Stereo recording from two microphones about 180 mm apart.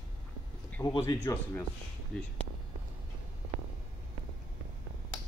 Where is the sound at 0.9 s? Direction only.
20° left (ahead or behind).